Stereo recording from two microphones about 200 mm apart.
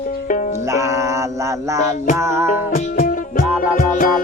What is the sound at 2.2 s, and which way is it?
Speech, 15° right (ahead or behind).